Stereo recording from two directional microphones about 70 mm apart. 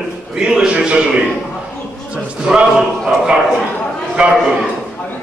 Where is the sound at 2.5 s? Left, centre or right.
Centre.